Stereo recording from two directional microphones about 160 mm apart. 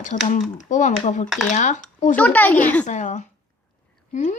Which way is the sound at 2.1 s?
10° left (ahead or behind).